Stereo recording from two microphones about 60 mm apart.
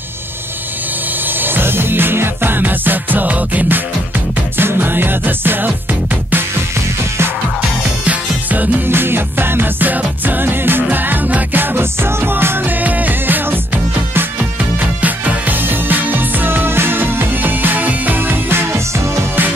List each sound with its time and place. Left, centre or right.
1.4 s music: right
8.0 s music: right
12.8 s music: right
14.8 s music: right